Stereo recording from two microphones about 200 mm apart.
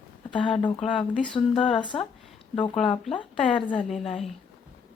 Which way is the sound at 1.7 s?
25° left (ahead or behind).